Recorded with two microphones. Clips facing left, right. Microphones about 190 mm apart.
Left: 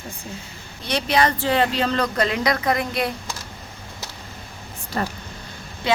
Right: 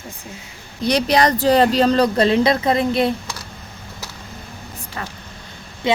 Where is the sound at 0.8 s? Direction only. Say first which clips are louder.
Right 4 dB; 40° right (ahead or behind).